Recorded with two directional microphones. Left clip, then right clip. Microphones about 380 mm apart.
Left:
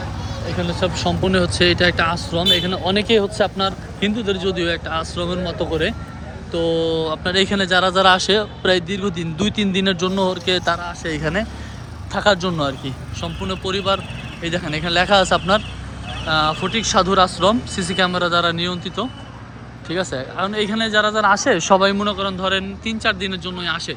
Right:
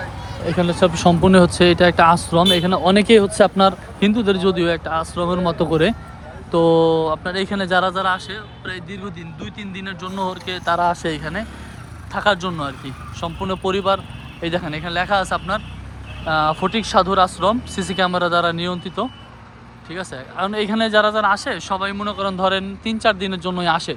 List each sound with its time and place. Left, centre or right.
0.6 s speech: centre
6.7 s speech: centre